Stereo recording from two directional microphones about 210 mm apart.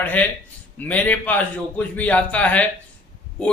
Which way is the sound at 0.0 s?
5° left (ahead or behind).